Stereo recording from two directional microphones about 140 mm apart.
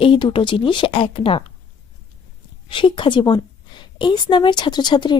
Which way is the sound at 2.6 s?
35° left (ahead or behind).